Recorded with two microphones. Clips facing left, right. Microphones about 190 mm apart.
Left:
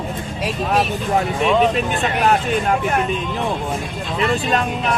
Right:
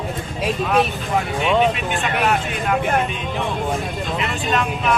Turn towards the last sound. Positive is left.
turn(degrees=40)  # may be behind; listen again after turning